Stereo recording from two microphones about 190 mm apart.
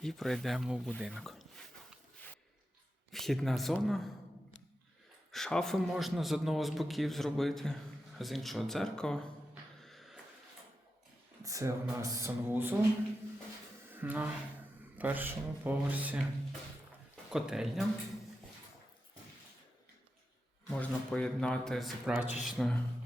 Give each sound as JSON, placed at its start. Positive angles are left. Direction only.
{"t": 0.0, "sound": "speech", "side_deg": 0}
{"t": 3.1, "sound": "a man's voice", "side_deg": 0}
{"t": 5.3, "sound": "a man's voice", "side_deg": 0}
{"t": 9.8, "sound": "a sound", "side_deg": 0}
{"t": 11.4, "sound": "speech", "side_deg": -15}
{"t": 13.9, "sound": "a man's voice", "side_deg": -10}
{"t": 20.7, "sound": "a man's voice", "side_deg": 5}